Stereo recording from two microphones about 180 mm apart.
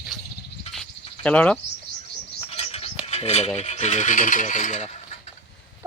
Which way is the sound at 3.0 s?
35° left (ahead or behind).